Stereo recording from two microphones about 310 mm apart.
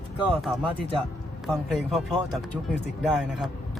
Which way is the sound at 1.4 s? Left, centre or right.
Centre.